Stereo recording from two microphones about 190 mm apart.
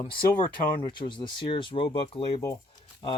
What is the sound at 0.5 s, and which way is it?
Speech, 25° left (ahead or behind).